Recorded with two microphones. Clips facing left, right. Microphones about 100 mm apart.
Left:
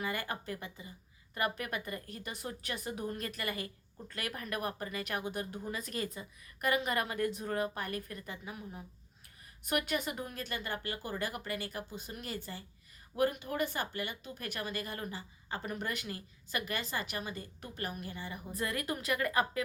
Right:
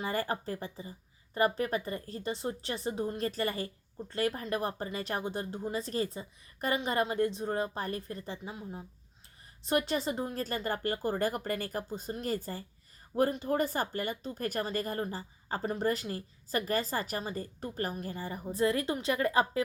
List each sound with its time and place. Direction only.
0.0 s speech: 35° right (ahead or behind)